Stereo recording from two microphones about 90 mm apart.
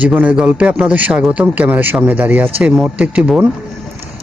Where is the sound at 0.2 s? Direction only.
10° right (ahead or behind).